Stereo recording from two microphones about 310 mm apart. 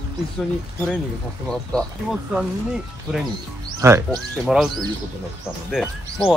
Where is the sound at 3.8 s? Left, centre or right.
Centre.